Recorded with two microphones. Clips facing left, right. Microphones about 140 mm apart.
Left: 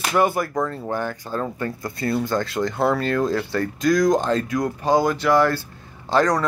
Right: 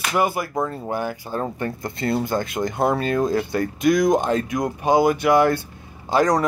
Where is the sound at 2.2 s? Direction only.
15° right (ahead or behind).